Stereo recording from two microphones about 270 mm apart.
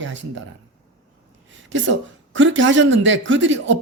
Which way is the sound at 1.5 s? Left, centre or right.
Right.